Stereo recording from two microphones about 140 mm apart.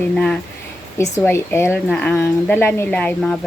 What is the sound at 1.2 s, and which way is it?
Speech, 15° left (ahead or behind).